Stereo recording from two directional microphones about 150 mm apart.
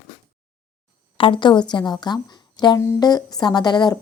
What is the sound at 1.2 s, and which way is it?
A woman's voice, 35° left (ahead or behind).